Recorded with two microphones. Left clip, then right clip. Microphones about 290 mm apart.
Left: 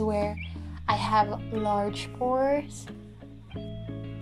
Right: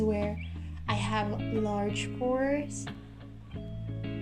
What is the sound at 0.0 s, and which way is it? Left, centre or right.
Music, left.